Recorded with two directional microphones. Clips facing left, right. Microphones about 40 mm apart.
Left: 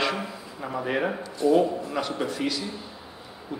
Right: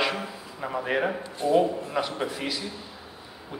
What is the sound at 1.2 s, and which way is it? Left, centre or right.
Speech, right.